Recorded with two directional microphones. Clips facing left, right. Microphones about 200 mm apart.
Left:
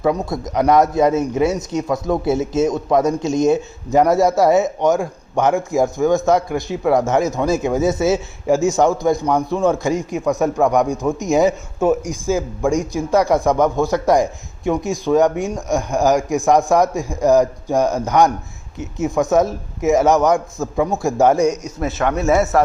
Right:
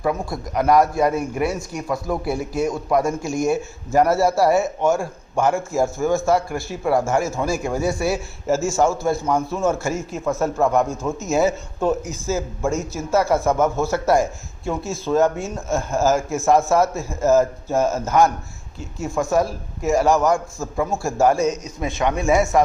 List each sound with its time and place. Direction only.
0.0 s a man's voice: 20° left (ahead or behind)
22.0 s a man's voice: 10° right (ahead or behind)